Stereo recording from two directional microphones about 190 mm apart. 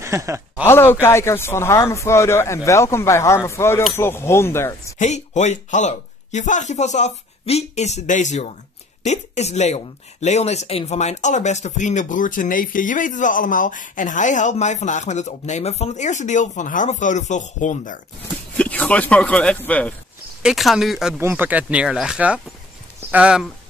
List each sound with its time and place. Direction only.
0.0 s speech: 15° right (ahead or behind)
0.7 s speech: 10° left (ahead or behind)
4.9 s speech: 40° left (ahead or behind)
18.6 s speech: 5° left (ahead or behind)